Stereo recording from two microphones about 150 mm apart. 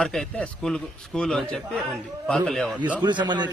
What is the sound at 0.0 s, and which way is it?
Speech, 5° left (ahead or behind).